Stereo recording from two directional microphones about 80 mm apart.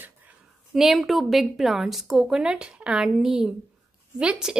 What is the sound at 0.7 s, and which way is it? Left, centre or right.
A woman's voice, centre.